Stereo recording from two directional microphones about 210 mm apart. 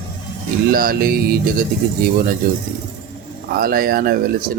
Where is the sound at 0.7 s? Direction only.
45° right (ahead or behind).